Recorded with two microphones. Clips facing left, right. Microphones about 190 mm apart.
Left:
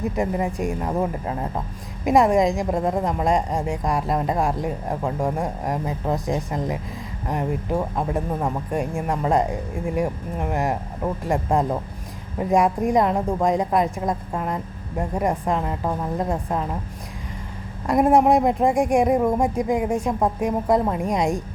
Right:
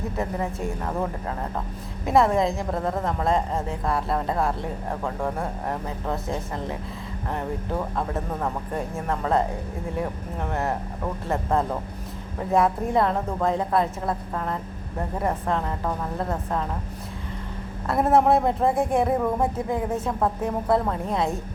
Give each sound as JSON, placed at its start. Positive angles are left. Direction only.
{"t": 0.2, "sound": "speech", "side_deg": 15}
{"t": 17.8, "sound": "speech", "side_deg": 15}